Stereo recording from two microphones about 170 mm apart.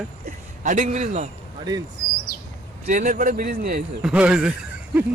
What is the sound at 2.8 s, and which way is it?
Speech, 50° right (ahead or behind).